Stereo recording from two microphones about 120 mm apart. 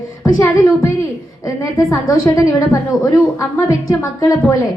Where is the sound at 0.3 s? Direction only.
20° left (ahead or behind).